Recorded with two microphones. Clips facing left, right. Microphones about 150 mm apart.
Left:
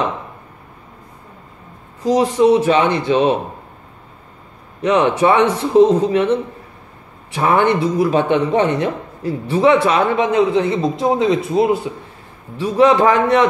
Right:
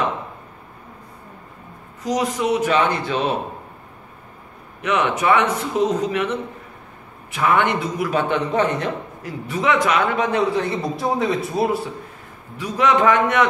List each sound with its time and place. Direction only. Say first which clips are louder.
2.0 s a man's voice: left 8 dB; 30° left (ahead or behind)
4.8 s a man's voice: left 5 dB; 30° left (ahead or behind)
8.2 s speech: left 1 dB; 15° left (ahead or behind)
9.2 s a man's voice: left 9 dB; 30° left (ahead or behind)